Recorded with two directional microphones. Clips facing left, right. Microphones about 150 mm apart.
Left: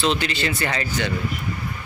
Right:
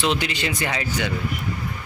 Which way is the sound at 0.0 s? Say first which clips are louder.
Left 1 dB; 15° right (ahead or behind).